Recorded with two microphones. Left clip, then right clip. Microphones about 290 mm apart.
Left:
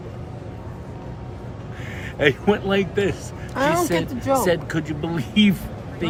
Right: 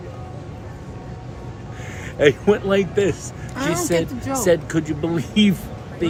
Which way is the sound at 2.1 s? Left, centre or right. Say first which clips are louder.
Right 3 dB; centre.